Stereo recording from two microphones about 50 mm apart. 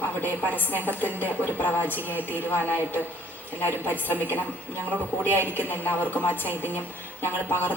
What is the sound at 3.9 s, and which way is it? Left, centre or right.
Speech, left.